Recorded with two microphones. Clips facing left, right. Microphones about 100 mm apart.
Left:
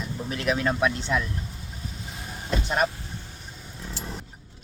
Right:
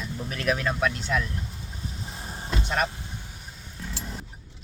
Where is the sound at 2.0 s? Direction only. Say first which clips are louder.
Even; 30° right (ahead or behind).